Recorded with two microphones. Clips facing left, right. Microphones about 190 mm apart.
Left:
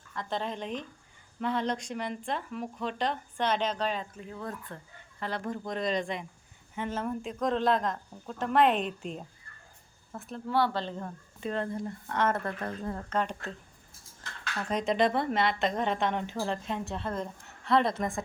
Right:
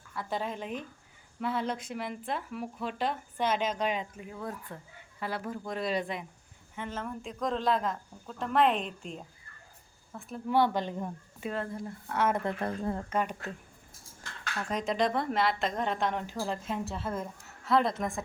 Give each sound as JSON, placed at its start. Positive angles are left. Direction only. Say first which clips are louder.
{"t": 0.1, "sound": "speech", "louder": "even", "side_deg": -10}
{"t": 6.7, "sound": "speech", "louder": "left 4 dB", "side_deg": 30}
{"t": 7.2, "sound": "a woman's voice", "louder": "left 2 dB", "side_deg": 5}
{"t": 10.5, "sound": "speech", "louder": "right 2 dB", "side_deg": -15}
{"t": 12.5, "sound": "speech", "louder": "right 3 dB", "side_deg": -30}
{"t": 13.1, "sound": "speech", "louder": "even", "side_deg": -10}
{"t": 14.7, "sound": "a woman's voice", "louder": "left 3 dB", "side_deg": 0}